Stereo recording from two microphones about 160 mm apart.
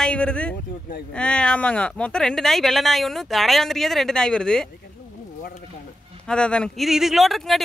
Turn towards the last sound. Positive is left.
turn(degrees=0)  # may be behind; listen again after turning